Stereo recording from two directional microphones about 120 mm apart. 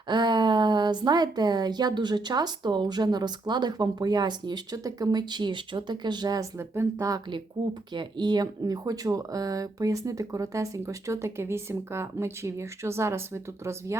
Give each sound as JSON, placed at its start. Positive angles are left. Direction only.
{"t": 0.1, "sound": "a woman's voice", "side_deg": -40}
{"t": 7.6, "sound": "speech", "side_deg": -45}